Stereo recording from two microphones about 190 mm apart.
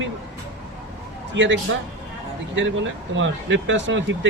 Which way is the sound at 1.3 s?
75° right (ahead or behind).